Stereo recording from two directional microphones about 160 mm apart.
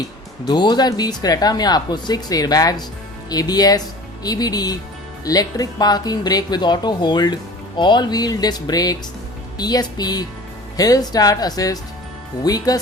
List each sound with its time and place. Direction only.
0.4 s speech: 25° left (ahead or behind)